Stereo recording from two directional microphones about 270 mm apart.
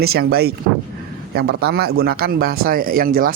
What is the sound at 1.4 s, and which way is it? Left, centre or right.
Speech, right.